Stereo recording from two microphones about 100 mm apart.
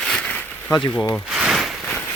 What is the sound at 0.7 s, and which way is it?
Speech, 45° left (ahead or behind).